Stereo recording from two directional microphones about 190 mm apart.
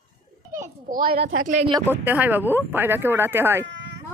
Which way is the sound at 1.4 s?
40° right (ahead or behind).